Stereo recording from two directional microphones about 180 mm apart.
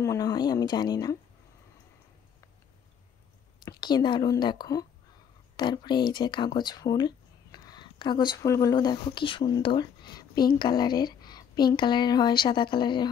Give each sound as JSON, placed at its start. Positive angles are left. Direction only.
{"t": 0.0, "sound": "speech", "side_deg": 20}
{"t": 3.6, "sound": "speech", "side_deg": 25}